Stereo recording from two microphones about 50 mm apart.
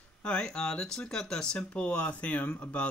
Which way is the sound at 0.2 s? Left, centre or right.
Centre.